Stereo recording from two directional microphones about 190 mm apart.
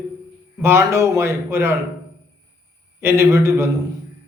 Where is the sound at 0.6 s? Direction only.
15° right (ahead or behind).